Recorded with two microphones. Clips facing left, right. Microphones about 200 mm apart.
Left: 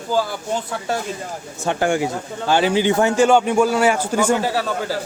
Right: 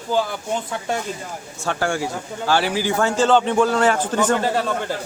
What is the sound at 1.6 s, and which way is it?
A man's voice, 20° left (ahead or behind).